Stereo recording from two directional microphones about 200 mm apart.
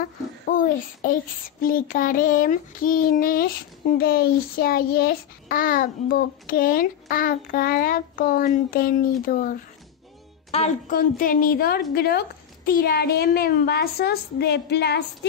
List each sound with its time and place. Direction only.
0.0 s a sound: 45° left (ahead or behind)
1.6 s a child's voice: 45° left (ahead or behind)
10.5 s speech: 30° left (ahead or behind)
10.9 s a child's voice: 45° left (ahead or behind)